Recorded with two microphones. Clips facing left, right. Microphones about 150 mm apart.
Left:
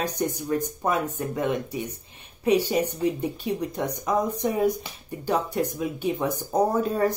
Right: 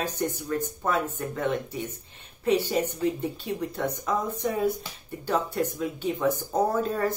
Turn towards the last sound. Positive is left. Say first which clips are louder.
# left 3 dB
turn(degrees=15)  # may be behind; listen again after turning